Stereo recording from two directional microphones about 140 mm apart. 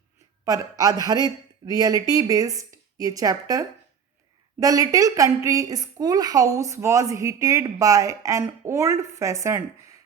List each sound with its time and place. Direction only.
0.4 s a woman's voice: 25° right (ahead or behind)